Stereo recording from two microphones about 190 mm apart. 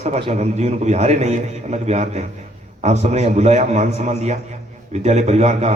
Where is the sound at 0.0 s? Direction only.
35° right (ahead or behind).